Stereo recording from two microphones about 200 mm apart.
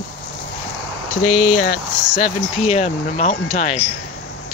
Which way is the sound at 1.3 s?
40° left (ahead or behind).